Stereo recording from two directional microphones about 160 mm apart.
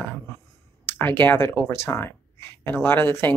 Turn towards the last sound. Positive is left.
turn(degrees=15)  # may be behind; listen again after turning